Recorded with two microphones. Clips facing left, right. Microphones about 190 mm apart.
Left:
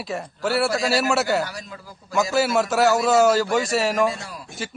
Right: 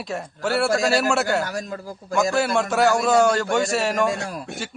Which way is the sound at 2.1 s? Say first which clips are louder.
Even; centre (ahead or behind).